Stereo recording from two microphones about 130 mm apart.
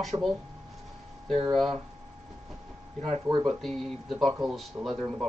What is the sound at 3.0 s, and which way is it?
Speech, 45° right (ahead or behind).